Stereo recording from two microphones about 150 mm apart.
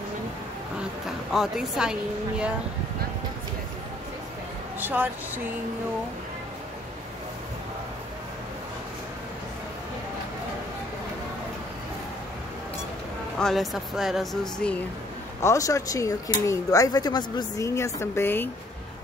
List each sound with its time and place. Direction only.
0.7 s a woman's voice: centre (ahead or behind)
4.7 s speech: 10° right (ahead or behind)
13.4 s speech: centre (ahead or behind)
15.4 s speech: 20° left (ahead or behind)